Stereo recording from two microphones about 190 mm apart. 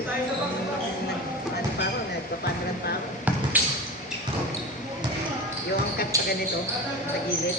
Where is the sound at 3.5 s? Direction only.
10° right (ahead or behind).